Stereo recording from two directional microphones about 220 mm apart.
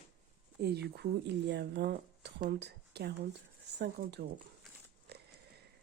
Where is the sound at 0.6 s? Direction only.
50° right (ahead or behind).